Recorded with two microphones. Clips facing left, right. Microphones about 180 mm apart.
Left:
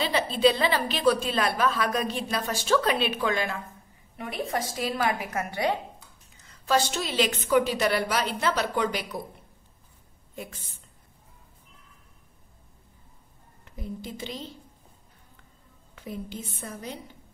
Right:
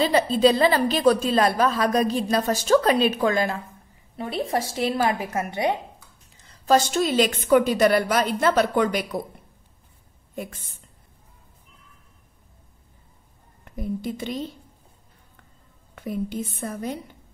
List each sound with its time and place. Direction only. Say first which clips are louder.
0.0 s a woman's voice: right 4 dB; 40° right (ahead or behind)
10.3 s a woman's voice: right 6 dB; 50° right (ahead or behind)
13.7 s a woman's voice: right 8 dB; 55° right (ahead or behind)
15.9 s a woman's voice: right 8 dB; 55° right (ahead or behind)